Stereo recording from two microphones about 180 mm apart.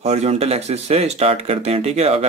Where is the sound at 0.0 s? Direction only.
35° right (ahead or behind).